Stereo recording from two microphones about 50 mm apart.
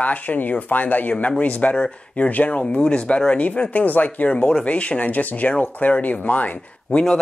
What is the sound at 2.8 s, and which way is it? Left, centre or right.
Speech, centre.